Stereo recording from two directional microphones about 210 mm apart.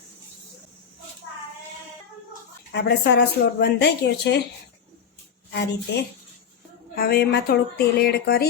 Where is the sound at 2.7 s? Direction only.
55° left (ahead or behind).